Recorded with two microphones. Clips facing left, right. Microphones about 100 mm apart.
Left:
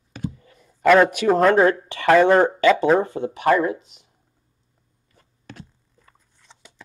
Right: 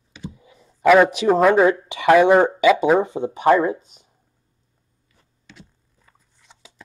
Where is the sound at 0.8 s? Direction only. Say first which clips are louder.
Right 1 dB; 5° right (ahead or behind); by 3.7 s 25° right (ahead or behind).